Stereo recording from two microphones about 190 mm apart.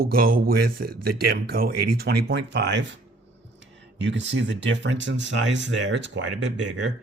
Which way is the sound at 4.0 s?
70° right (ahead or behind).